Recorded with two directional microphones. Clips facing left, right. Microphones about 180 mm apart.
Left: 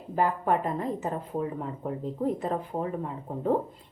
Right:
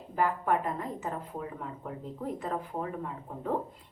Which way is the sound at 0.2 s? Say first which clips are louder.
Left 3 dB; 25° left (ahead or behind).